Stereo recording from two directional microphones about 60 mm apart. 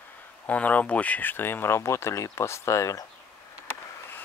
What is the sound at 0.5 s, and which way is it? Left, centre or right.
Speech, left.